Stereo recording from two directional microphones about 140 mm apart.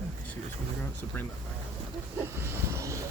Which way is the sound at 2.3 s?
20° right (ahead or behind).